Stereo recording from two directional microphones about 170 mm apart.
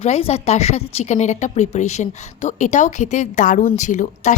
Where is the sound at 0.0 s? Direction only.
35° left (ahead or behind).